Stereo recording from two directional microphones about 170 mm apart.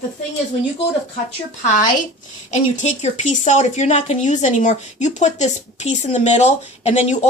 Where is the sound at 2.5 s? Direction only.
45° left (ahead or behind).